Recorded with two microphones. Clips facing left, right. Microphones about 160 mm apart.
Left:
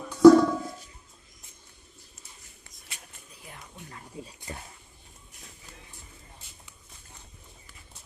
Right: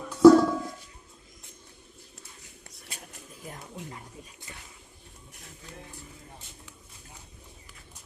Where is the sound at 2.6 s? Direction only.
70° right (ahead or behind).